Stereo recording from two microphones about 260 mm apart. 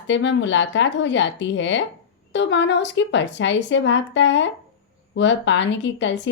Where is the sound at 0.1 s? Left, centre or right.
Left.